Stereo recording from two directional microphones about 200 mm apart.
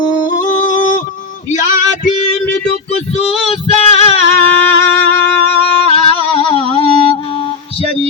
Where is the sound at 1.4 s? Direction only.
40° left (ahead or behind).